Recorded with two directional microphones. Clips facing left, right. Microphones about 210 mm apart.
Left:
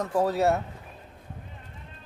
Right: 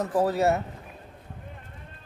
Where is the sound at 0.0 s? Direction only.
5° right (ahead or behind).